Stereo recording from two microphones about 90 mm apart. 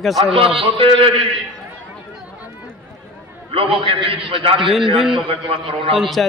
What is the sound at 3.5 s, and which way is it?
A man's voice, 90° right.